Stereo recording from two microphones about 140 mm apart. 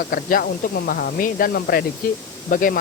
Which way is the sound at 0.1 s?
90° left.